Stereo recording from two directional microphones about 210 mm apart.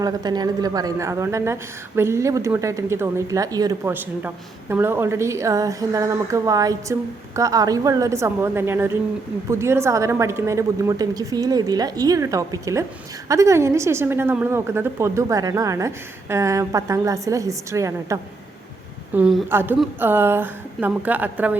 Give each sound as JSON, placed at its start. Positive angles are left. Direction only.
{"t": 0.0, "sound": "a woman's voice", "side_deg": -20}
{"t": 19.1, "sound": "a woman's voice", "side_deg": -5}